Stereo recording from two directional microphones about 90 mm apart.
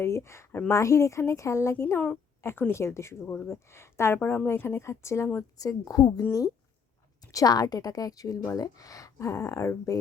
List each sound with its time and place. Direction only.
0.0 s a woman's voice: 30° left (ahead or behind)
5.5 s a woman's voice: 45° left (ahead or behind)
7.3 s a woman's voice: 45° left (ahead or behind)